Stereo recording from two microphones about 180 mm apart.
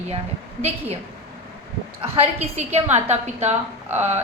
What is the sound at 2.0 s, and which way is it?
A woman's voice, 35° right (ahead or behind).